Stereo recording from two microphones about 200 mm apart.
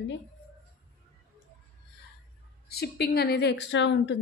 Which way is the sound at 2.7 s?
50° left (ahead or behind).